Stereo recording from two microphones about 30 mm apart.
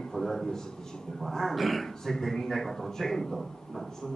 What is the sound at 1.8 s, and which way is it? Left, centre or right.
A man's voice, centre.